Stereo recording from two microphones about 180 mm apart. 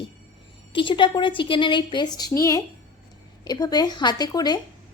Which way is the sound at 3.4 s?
20° left (ahead or behind).